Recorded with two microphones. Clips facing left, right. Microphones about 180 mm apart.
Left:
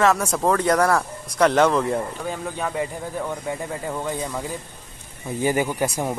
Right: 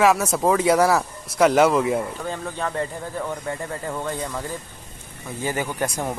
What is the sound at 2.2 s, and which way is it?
Speech, 10° left (ahead or behind).